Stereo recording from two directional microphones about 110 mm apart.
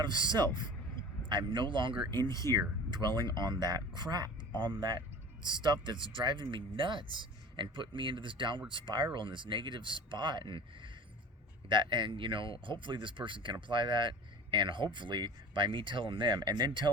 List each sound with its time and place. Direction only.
0.0 s speech: 45° right (ahead or behind)